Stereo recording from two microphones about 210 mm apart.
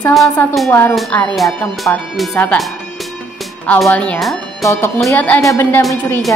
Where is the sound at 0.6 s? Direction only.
10° left (ahead or behind).